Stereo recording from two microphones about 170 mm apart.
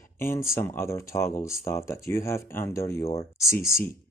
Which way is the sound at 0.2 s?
15° left (ahead or behind).